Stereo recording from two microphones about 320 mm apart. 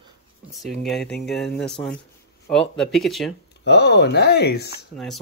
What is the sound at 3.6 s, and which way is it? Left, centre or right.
Speech, left.